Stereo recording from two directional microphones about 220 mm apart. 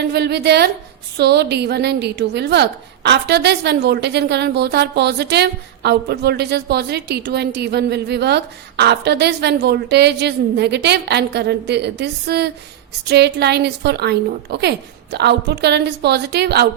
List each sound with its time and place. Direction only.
0.0 s a woman's voice: 50° right (ahead or behind)